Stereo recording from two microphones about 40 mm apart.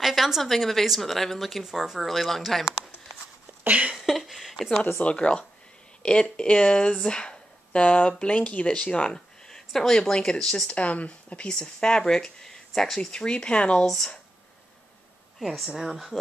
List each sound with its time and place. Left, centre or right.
0.0 s speech: centre
1.6 s speech: centre
2.0 s speech: centre
3.9 s speech: centre
5.0 s speech: left
7.8 s speech: left
9.8 s speech: centre
10.1 s speech: left
10.4 s speech: centre
10.7 s speech: left
11.4 s speech: centre
13.1 s speech: left
13.8 s speech: centre
15.7 s speech: centre